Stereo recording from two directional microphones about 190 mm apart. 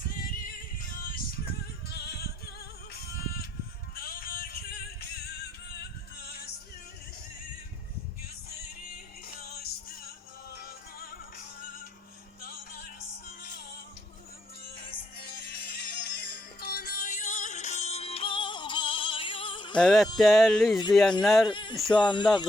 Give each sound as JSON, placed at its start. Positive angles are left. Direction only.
{"t": 0.0, "sound": "music", "side_deg": 50}
{"t": 1.9, "sound": "music", "side_deg": 55}
{"t": 6.1, "sound": "music", "side_deg": 55}
{"t": 9.4, "sound": "music", "side_deg": 55}
{"t": 12.4, "sound": "music", "side_deg": 50}
{"t": 15.2, "sound": "music", "side_deg": 55}
{"t": 19.8, "sound": "a sound", "side_deg": 0}
{"t": 21.5, "sound": "speech", "side_deg": 25}